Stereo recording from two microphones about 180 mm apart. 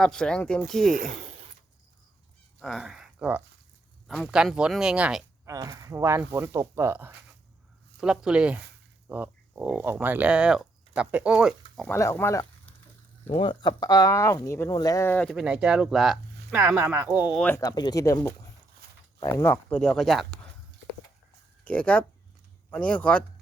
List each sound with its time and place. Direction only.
0.0 s speech: 5° left (ahead or behind)
0.9 s a sound: 45° right (ahead or behind)
2.6 s speech: centre (ahead or behind)
5.5 s speech: 20° right (ahead or behind)
11.9 s speech: 15° left (ahead or behind)
13.2 s speech: 30° left (ahead or behind); by 16.6 s centre (ahead or behind)
16.6 s speech: 15° right (ahead or behind)
17.4 s speech: 15° left (ahead or behind); by 20.2 s centre (ahead or behind)
21.6 s speech: 5° left (ahead or behind)